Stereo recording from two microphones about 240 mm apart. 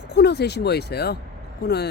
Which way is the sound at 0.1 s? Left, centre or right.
Left.